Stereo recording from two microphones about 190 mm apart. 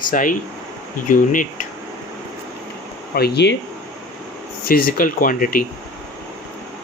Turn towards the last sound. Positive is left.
turn(degrees=50)  # may be behind; listen again after turning